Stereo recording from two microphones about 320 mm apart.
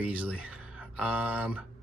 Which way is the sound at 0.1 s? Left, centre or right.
Centre.